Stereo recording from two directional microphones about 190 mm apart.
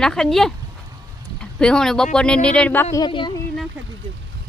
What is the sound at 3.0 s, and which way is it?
Speech, 25° left (ahead or behind).